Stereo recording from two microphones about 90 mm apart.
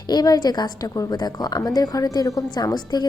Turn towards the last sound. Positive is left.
turn(degrees=50)  # may be behind; listen again after turning